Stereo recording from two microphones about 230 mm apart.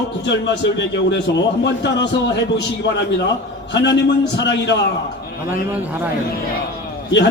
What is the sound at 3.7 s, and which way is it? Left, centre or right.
A man's voice, left.